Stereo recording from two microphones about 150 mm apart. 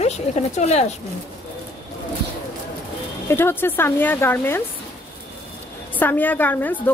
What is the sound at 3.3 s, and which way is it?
A woman's voice, 15° left (ahead or behind).